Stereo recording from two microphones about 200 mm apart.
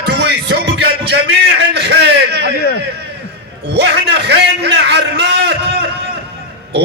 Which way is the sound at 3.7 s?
60° right (ahead or behind).